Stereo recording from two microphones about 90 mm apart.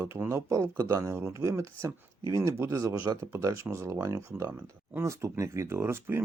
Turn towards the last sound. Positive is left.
turn(degrees=-25)  # may be behind; listen again after turning